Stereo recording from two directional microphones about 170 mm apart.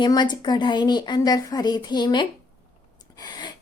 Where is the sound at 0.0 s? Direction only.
25° left (ahead or behind).